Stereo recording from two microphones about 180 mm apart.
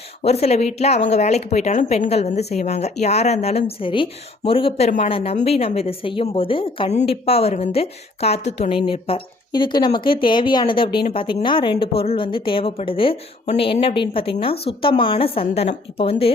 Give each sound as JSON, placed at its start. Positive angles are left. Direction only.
{"t": 0.2, "sound": "a woman's voice", "side_deg": 35}